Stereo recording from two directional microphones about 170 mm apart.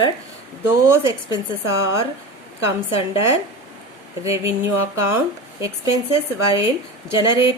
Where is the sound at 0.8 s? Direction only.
20° right (ahead or behind).